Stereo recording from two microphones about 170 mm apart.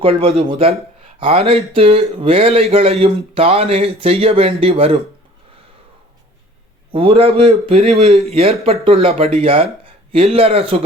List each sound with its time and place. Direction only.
0.0 s speech: 35° right (ahead or behind)
6.9 s speech: 35° right (ahead or behind)